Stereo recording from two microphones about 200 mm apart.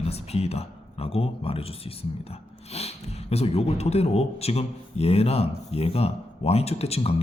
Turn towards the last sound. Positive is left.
turn(degrees=30)  # may be behind; listen again after turning